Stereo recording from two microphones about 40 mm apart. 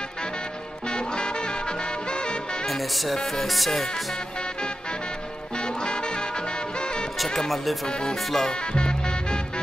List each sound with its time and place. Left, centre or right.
0.8 s music: left
2.6 s speech: centre
5.6 s music: left
7.2 s speech: centre
8.7 s music: left